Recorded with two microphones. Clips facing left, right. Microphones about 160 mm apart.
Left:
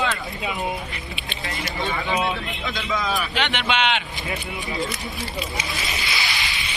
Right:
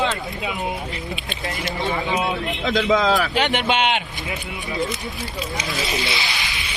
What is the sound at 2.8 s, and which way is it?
Speech, 90° right.